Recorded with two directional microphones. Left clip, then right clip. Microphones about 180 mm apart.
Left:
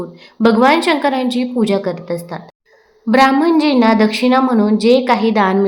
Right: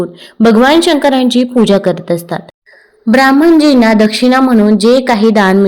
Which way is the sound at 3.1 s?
25° right (ahead or behind).